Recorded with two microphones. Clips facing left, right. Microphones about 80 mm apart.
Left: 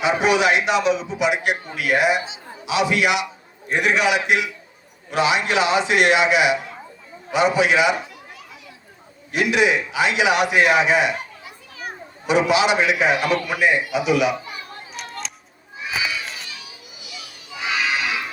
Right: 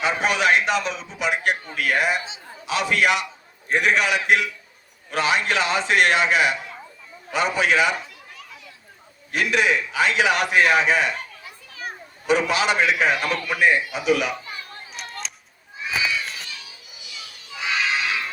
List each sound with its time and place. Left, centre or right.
0.2 s a man's voice: right
9.3 s a man's voice: right
12.3 s a man's voice: right
15.0 s a sound: centre
17.5 s music: centre